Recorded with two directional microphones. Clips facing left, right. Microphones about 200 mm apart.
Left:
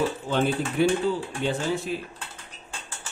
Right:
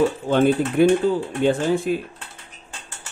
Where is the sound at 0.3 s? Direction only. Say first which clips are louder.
Right 7 dB; 45° right (ahead or behind).